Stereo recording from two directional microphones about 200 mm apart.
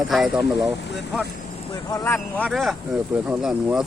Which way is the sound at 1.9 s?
15° left (ahead or behind).